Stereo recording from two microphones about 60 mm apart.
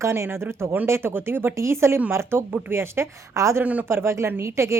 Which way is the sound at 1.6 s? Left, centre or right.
Right.